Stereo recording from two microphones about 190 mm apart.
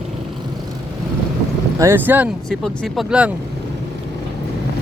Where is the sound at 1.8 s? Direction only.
10° right (ahead or behind).